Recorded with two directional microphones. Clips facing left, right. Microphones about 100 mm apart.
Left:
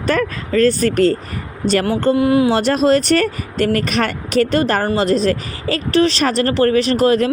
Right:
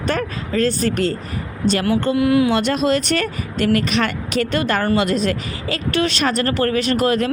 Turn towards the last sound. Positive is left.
turn(degrees=35)  # may be behind; listen again after turning